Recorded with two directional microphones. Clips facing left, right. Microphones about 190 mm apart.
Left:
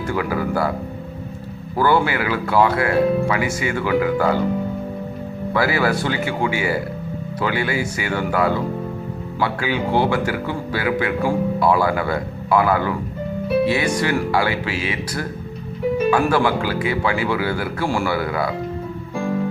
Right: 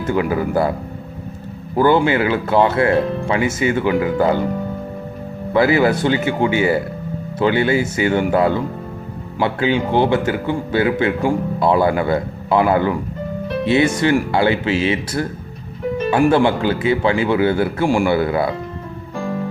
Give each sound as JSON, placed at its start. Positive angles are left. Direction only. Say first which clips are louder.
{"t": 0.1, "sound": "speech", "louder": "right 4 dB", "side_deg": -25}
{"t": 1.7, "sound": "speech", "louder": "right 4 dB", "side_deg": -20}
{"t": 5.5, "sound": "speech", "louder": "right 5 dB", "side_deg": -20}